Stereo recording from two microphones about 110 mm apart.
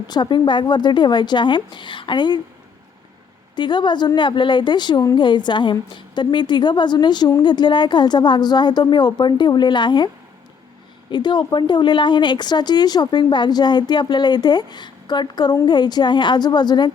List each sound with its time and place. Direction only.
0.1 s a woman's voice: 45° left (ahead or behind)
3.5 s a woman's voice: 45° left (ahead or behind)
11.1 s a woman's voice: 45° left (ahead or behind)